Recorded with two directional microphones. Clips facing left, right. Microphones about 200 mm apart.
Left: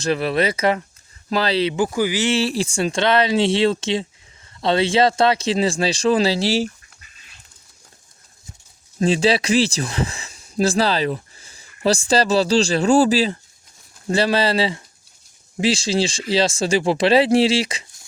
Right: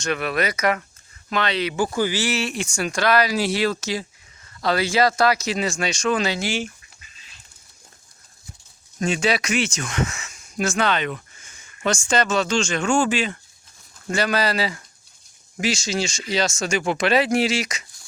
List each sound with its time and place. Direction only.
0.0 s speech: 30° left (ahead or behind)
1.7 s speech: 15° left (ahead or behind)
2.3 s speech: 30° left (ahead or behind)
9.0 s speech: 30° left (ahead or behind)